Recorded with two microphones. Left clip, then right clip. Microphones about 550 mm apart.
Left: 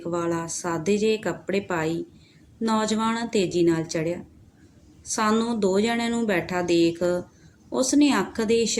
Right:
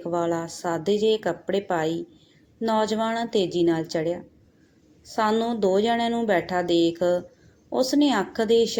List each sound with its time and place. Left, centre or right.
0.0 s a woman's voice: left